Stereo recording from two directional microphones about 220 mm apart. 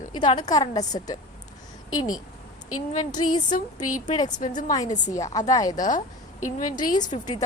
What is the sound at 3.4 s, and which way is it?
Speech, 35° left (ahead or behind).